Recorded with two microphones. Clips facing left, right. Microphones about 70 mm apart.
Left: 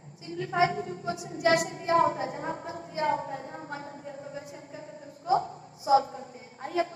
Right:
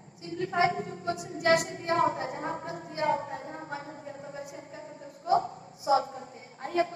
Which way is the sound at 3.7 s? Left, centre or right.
Left.